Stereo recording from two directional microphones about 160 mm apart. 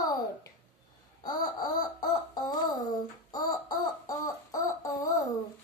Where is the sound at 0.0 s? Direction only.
25° left (ahead or behind).